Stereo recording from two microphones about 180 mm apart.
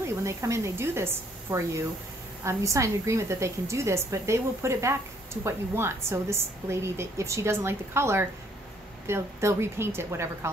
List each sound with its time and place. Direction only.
0.0 s a woman's voice: 15° right (ahead or behind)